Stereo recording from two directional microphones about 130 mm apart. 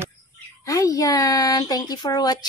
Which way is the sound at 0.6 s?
25° left (ahead or behind).